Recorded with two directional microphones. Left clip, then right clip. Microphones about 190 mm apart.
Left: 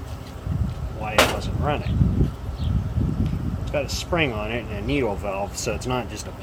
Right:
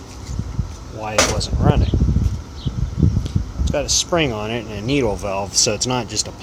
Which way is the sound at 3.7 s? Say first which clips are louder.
Right 7 dB; 45° right (ahead or behind).